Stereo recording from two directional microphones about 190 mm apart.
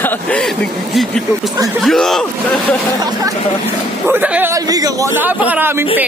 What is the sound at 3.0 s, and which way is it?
A man's voice, 20° right (ahead or behind).